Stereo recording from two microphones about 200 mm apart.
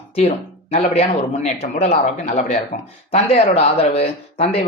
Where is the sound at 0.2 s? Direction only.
30° left (ahead or behind).